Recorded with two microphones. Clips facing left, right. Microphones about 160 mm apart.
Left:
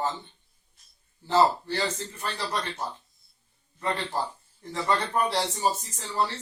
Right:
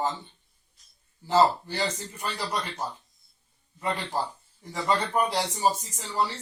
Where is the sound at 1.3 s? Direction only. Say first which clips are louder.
Even; 15° right (ahead or behind).